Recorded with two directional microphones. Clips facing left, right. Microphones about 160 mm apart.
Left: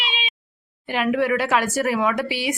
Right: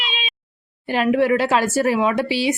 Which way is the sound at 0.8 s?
35° right (ahead or behind).